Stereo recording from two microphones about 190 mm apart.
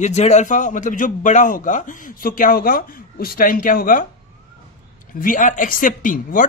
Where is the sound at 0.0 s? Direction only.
35° left (ahead or behind).